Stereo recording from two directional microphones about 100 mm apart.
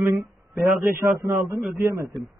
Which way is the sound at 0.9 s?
25° right (ahead or behind).